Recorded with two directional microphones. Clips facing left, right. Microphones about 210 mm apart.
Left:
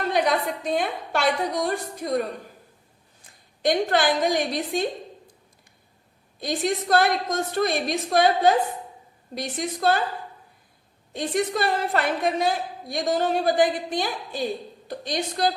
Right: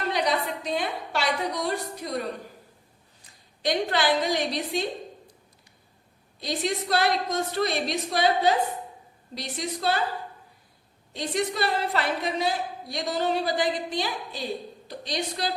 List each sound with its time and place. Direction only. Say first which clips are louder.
0.1 s a woman's voice: left 3 dB; 50° left (ahead or behind)
3.6 s a woman's voice: left 4 dB; 50° left (ahead or behind)
6.4 s a woman's voice: left 3 dB; 50° left (ahead or behind)
11.1 s a woman's voice: left 3 dB; 50° left (ahead or behind)